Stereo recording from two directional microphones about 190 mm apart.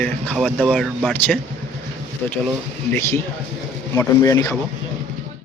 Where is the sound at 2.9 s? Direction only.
15° left (ahead or behind).